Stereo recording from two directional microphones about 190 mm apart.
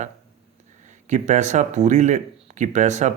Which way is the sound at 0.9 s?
40° right (ahead or behind).